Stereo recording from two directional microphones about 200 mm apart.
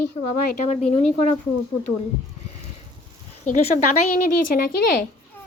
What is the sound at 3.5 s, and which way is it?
Speech, 40° left (ahead or behind).